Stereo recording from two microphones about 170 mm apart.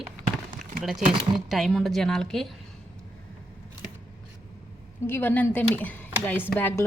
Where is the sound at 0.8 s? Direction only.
5° right (ahead or behind).